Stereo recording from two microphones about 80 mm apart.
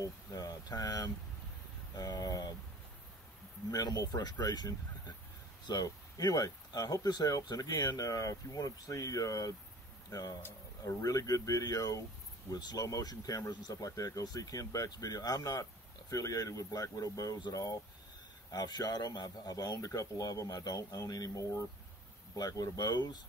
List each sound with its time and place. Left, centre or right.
0.0 s a sound: left
2.0 s speech: left
3.7 s speech: left
18.5 s speech: left